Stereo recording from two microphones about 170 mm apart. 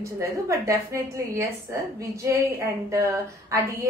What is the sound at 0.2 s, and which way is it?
A woman's voice, 15° right (ahead or behind).